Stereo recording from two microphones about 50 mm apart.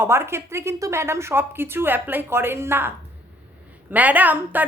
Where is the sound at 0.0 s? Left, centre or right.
Right.